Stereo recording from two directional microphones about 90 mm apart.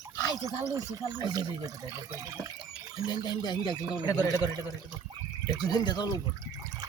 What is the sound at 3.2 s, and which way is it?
Speech, 55° left (ahead or behind).